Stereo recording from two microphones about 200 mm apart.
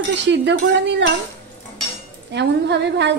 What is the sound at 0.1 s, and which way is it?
Speech, 60° right (ahead or behind).